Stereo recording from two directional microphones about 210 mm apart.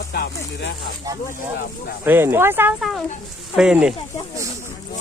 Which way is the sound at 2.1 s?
10° right (ahead or behind).